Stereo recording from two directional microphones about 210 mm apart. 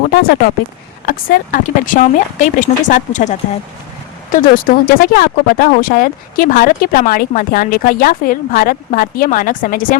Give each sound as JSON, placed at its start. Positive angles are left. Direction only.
{"t": 0.1, "sound": "speech", "side_deg": 45}